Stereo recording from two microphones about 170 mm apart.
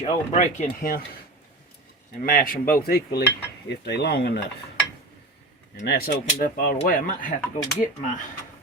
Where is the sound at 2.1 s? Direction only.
55° left (ahead or behind).